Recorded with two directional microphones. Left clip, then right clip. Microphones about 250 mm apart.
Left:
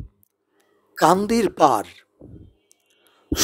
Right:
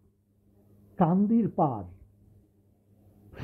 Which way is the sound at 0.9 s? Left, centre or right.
Left.